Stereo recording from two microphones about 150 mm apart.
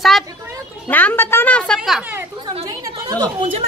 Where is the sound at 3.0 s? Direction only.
25° right (ahead or behind).